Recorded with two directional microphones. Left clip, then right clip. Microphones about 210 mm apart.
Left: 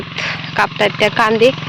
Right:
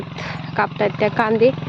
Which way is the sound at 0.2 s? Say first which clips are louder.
Left 6 dB; 5° right (ahead or behind).